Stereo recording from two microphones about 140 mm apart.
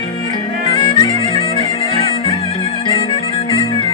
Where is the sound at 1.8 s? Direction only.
40° left (ahead or behind).